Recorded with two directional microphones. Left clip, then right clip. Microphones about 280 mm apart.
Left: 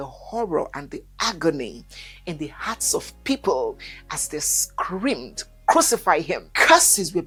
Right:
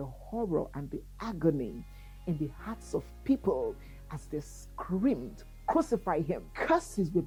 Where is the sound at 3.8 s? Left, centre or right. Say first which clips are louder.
Left 17 dB; centre.